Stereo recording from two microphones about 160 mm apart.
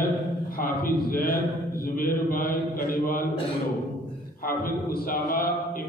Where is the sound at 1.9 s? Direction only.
65° left (ahead or behind).